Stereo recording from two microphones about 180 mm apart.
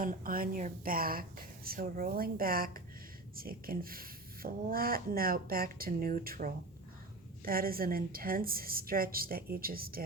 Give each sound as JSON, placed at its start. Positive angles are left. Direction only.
{"t": 0.0, "sound": "a woman's voice", "side_deg": -50}